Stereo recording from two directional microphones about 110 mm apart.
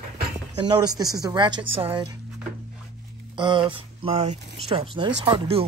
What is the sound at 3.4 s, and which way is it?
Speech, 45° right (ahead or behind).